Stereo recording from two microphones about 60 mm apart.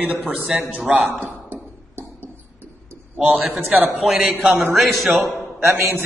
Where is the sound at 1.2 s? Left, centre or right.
Right.